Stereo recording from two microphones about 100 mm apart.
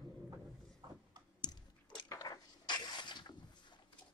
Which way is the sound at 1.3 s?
45° left (ahead or behind).